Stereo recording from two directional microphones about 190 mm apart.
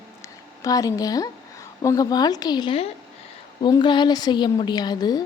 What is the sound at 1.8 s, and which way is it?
A woman's voice, 20° left (ahead or behind).